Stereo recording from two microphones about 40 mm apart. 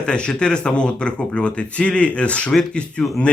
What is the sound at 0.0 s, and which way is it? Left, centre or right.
Speech, left.